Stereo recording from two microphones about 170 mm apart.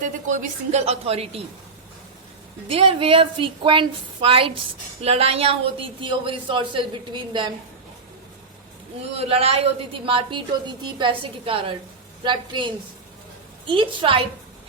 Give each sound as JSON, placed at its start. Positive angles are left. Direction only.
{"t": 0.3, "sound": "a woman's voice", "side_deg": -40}
{"t": 2.6, "sound": "a woman's voice", "side_deg": -30}
{"t": 9.1, "sound": "a woman's voice", "side_deg": -35}